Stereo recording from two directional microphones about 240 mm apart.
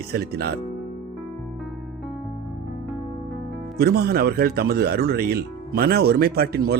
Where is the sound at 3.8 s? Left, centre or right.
Right.